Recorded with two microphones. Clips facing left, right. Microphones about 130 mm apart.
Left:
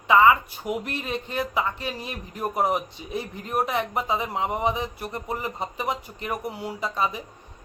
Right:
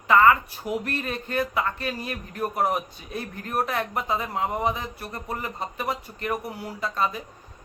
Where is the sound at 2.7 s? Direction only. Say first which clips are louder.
Left 2 dB; 15° left (ahead or behind).